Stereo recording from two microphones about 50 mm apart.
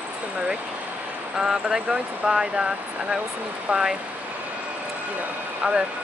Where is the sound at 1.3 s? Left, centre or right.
Centre.